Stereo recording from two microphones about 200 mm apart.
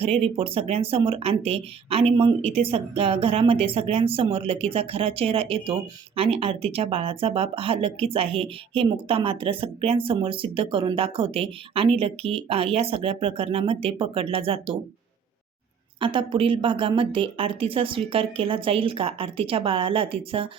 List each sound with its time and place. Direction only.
0.0 s speech: 30° right (ahead or behind)
16.0 s speech: 25° right (ahead or behind)